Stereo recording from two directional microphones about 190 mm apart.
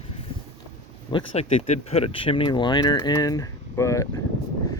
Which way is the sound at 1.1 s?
25° left (ahead or behind).